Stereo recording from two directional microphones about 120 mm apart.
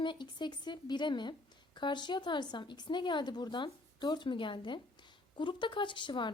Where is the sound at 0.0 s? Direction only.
40° left (ahead or behind).